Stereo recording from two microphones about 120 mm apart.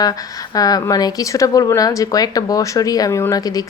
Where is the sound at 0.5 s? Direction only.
30° left (ahead or behind).